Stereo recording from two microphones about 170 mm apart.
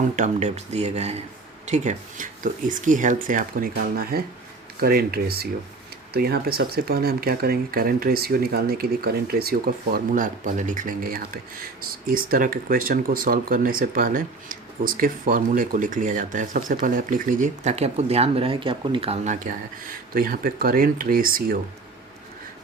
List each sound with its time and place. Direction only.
0.2 s speech: 40° right (ahead or behind)
20.1 s speech: 60° right (ahead or behind)